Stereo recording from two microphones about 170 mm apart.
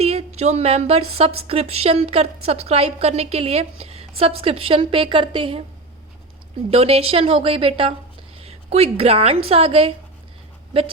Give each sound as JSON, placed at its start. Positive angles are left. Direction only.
{"t": 0.0, "sound": "a woman's voice", "side_deg": -35}
{"t": 6.7, "sound": "a woman's voice", "side_deg": -35}